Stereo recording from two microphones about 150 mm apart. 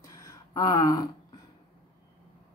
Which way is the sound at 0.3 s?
25° left (ahead or behind).